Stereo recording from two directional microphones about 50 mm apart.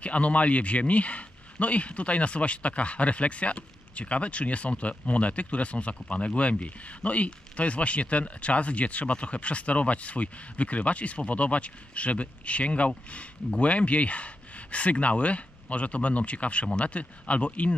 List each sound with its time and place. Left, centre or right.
0.0 s speech: left